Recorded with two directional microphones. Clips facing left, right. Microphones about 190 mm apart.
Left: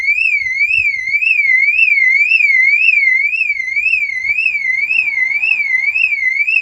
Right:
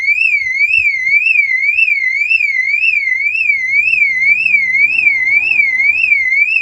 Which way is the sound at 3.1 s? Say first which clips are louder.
Even; 50° right (ahead or behind).